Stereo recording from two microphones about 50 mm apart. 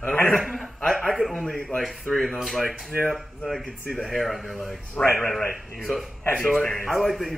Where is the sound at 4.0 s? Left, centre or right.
Centre.